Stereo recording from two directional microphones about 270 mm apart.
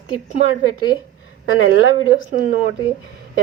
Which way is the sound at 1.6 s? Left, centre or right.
Left.